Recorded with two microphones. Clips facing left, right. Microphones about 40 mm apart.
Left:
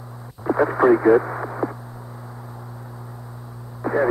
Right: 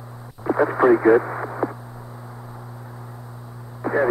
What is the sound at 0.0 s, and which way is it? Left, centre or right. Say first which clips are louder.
Radio: left 1 dB; centre.